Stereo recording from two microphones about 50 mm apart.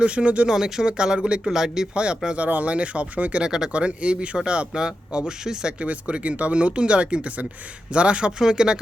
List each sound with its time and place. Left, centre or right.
0.0 s speech: right
0.5 s speech: centre
1.9 s speech: right
3.4 s speech: centre